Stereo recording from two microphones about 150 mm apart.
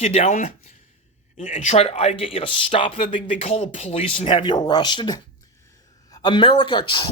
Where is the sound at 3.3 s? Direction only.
45° left (ahead or behind).